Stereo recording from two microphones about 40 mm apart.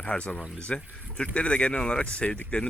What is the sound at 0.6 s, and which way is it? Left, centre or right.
Speech, left.